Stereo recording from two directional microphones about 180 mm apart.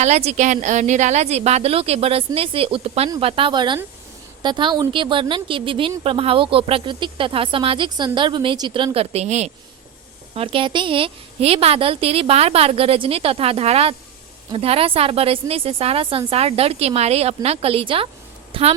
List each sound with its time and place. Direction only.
0.0 s a woman's voice: 40° right (ahead or behind)